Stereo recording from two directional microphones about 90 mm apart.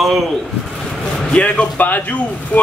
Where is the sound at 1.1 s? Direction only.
10° left (ahead or behind).